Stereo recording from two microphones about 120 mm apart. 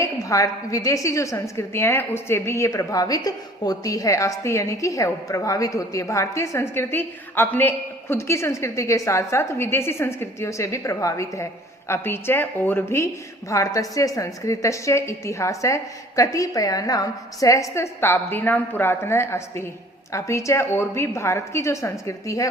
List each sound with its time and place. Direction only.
0.0 s a woman's voice: 25° left (ahead or behind)